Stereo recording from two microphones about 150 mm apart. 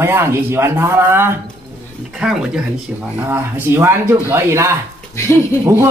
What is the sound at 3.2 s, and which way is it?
A man's voice, 15° right (ahead or behind).